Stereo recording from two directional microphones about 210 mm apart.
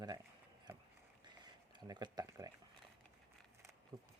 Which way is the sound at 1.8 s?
20° right (ahead or behind).